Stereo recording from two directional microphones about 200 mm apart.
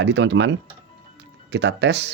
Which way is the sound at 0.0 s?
60° right (ahead or behind).